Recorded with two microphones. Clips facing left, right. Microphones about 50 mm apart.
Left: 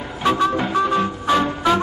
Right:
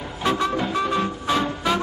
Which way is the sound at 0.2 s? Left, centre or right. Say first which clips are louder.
Left 4 dB; centre.